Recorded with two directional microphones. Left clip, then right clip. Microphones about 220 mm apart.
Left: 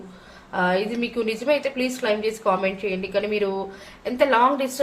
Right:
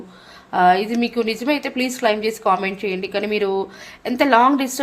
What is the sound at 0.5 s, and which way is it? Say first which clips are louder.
A woman's voice: right 7 dB; 50° right (ahead or behind).